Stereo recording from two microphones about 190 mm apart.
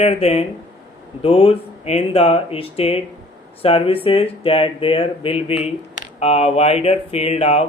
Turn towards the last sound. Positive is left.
turn(degrees=35)  # may be behind; listen again after turning